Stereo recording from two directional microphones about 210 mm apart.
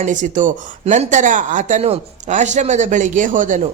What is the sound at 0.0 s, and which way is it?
Speech, 35° right (ahead or behind).